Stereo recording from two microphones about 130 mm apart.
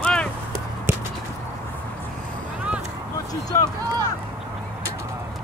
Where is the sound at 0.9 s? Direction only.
20° right (ahead or behind).